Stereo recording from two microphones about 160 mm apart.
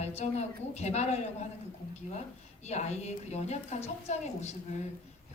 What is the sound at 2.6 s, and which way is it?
A woman's voice, 45° left (ahead or behind).